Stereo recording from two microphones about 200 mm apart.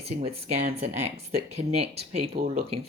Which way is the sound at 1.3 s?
30° right (ahead or behind).